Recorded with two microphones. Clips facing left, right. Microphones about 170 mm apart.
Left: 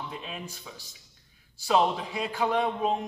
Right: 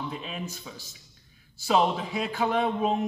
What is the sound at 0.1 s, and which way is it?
A man's voice, centre (ahead or behind).